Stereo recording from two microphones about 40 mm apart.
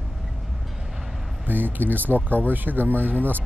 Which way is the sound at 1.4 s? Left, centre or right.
Right.